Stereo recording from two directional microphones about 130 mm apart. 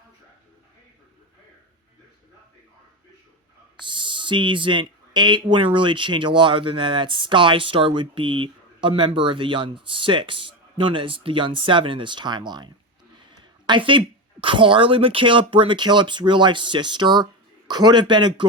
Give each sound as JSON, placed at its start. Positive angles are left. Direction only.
{"t": 3.8, "sound": "speech", "side_deg": -40}
{"t": 13.4, "sound": "a sound", "side_deg": -35}
{"t": 14.4, "sound": "speech", "side_deg": -40}